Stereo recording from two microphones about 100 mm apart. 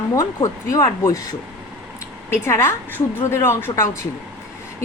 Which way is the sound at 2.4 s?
25° left (ahead or behind).